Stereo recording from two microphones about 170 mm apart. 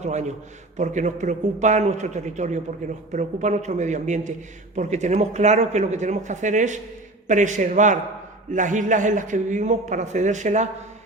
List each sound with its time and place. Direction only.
0.0 s a man's voice: 45° right (ahead or behind)